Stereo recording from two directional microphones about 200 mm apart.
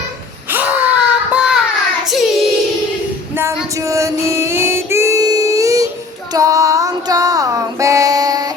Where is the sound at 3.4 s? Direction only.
10° right (ahead or behind).